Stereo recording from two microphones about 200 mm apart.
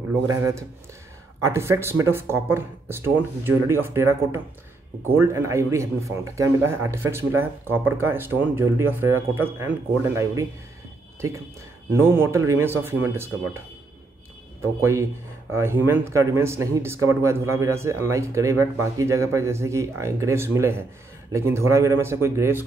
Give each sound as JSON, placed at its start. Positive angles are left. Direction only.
{"t": 0.3, "sound": "speech", "side_deg": -15}
{"t": 15.5, "sound": "speech", "side_deg": -10}